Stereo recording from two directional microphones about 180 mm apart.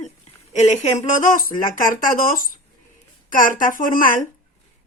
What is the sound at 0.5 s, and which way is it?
Speech, 40° left (ahead or behind).